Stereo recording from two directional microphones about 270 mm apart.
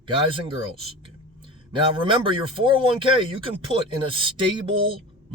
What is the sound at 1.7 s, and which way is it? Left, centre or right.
Speech, centre.